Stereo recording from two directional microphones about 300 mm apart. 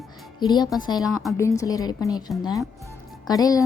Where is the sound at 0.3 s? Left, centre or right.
Centre.